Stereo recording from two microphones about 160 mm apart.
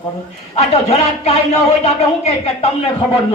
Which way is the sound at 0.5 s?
40° left (ahead or behind).